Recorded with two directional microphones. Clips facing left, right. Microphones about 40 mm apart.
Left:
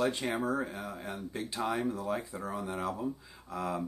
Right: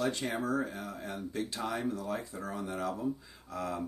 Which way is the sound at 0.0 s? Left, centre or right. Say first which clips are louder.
Left 2 dB; left.